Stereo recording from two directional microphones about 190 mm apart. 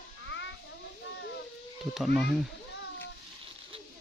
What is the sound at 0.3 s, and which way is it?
Children playing, 70° left (ahead or behind).